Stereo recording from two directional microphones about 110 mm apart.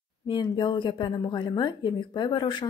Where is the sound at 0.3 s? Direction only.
45° left (ahead or behind).